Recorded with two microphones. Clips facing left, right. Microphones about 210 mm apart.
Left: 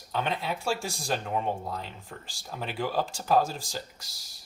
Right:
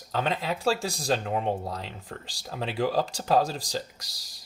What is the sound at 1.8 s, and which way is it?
Speech, 90° right.